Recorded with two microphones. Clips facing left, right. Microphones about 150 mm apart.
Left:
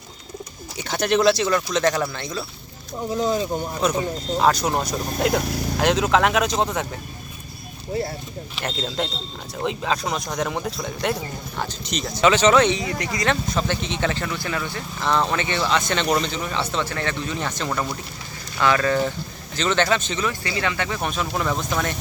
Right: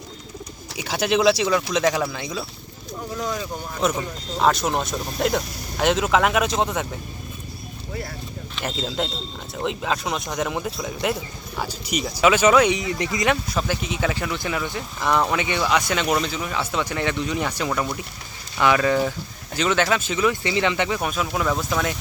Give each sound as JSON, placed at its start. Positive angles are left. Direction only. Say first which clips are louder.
{"t": 0.8, "sound": "speech", "louder": "left 1 dB", "side_deg": -5}
{"t": 3.1, "sound": "speech", "louder": "left 6 dB", "side_deg": 25}
{"t": 4.4, "sound": "speech", "louder": "even", "side_deg": 0}
{"t": 8.6, "sound": "speech", "louder": "even", "side_deg": -5}
{"t": 13.3, "sound": "speech", "louder": "left 1 dB", "side_deg": -5}
{"t": 17.7, "sound": "speech", "louder": "right 1 dB", "side_deg": 0}
{"t": 18.6, "sound": "speech", "louder": "right 1 dB", "side_deg": -15}
{"t": 20.4, "sound": "speech", "louder": "right 4 dB", "side_deg": -20}